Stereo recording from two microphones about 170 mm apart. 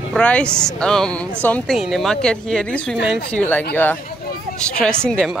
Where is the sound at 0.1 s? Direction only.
5° left (ahead or behind).